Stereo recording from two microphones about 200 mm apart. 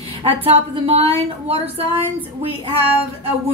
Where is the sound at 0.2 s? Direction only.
30° right (ahead or behind).